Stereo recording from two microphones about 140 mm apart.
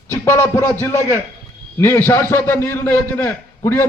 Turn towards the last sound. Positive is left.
turn(degrees=15)  # may be behind; listen again after turning